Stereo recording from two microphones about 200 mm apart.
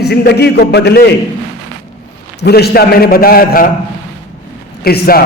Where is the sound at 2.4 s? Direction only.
55° left (ahead or behind).